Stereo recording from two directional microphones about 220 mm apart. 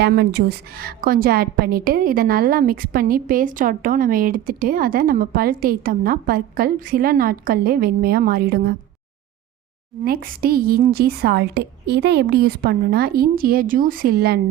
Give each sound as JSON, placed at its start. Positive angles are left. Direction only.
{"t": 0.0, "sound": "a woman's voice", "side_deg": -45}
{"t": 10.0, "sound": "a woman's voice", "side_deg": -40}